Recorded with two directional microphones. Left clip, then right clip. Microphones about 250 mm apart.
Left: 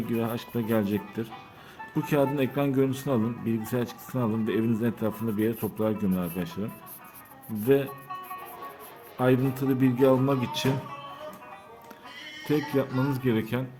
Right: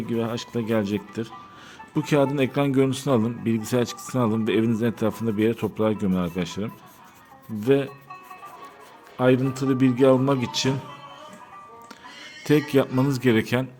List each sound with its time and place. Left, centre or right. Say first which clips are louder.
0.0 s speech: right 3 dB; centre
9.1 s speech: right 4 dB; centre
12.5 s speech: right 6 dB; right